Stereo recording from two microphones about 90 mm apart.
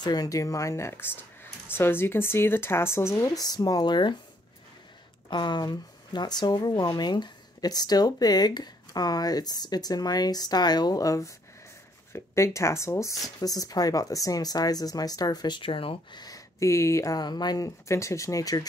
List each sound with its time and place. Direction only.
0.0 s speech: 45° left (ahead or behind)
5.3 s speech: 55° left (ahead or behind); by 16.2 s 85° left
16.2 s speech: 40° left (ahead or behind)
17.2 s speech: 50° left (ahead or behind)